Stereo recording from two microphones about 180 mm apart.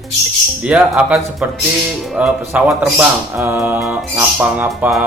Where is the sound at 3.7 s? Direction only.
Centre (ahead or behind).